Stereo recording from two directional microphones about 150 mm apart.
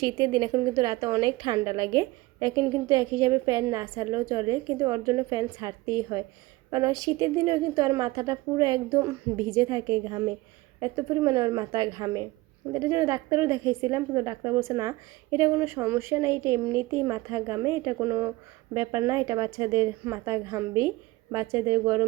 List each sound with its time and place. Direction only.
0.0 s a woman's voice: 30° right (ahead or behind)